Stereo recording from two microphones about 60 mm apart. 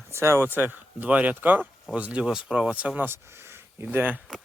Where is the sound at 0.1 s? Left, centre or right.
Right.